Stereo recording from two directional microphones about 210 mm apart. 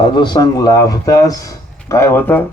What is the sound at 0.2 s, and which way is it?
Speech, 20° left (ahead or behind).